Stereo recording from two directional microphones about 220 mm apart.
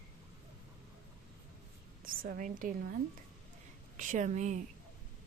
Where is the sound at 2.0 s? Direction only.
40° right (ahead or behind).